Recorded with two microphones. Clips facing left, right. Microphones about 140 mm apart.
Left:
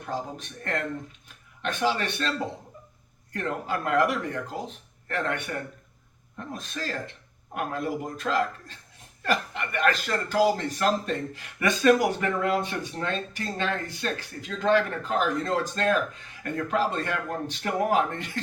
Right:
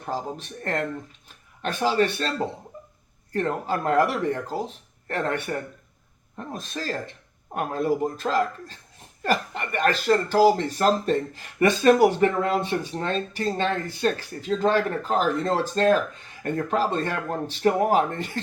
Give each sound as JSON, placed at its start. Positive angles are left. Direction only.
{"t": 0.0, "sound": "speech", "side_deg": -35}
{"t": 3.3, "sound": "speech", "side_deg": -35}